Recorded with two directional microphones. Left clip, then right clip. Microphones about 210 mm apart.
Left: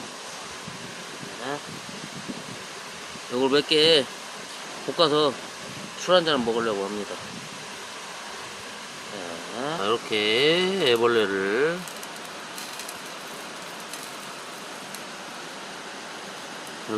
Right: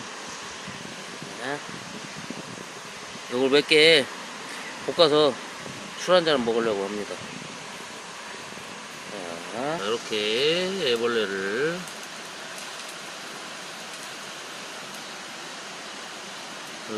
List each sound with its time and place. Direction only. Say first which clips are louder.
3.3 s speech: right 2 dB; 10° right (ahead or behind)
9.8 s speech: left 6 dB; 35° left (ahead or behind)